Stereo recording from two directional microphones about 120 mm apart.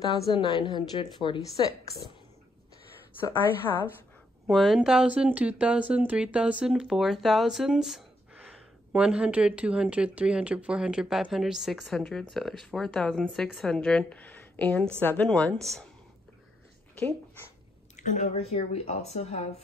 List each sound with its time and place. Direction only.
0.3 s a woman's voice: 40° left (ahead or behind)
3.2 s speech: 20° left (ahead or behind)
4.5 s speech: centre (ahead or behind)
17.9 s speech: 85° left; by 19.4 s 65° left (ahead or behind)